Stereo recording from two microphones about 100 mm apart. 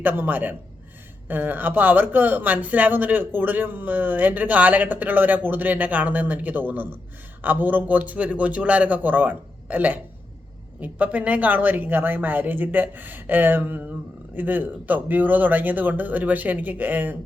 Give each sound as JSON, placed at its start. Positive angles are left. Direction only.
{"t": 0.0, "sound": "speech", "side_deg": -20}